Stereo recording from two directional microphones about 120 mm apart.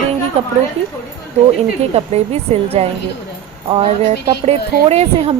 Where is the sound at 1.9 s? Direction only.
60° right (ahead or behind).